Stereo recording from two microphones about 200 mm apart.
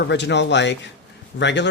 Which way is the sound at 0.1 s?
60° left (ahead or behind).